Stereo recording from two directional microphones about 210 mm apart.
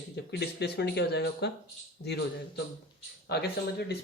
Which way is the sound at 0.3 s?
50° left (ahead or behind).